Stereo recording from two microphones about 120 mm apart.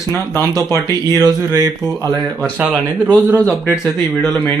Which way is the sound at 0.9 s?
30° right (ahead or behind).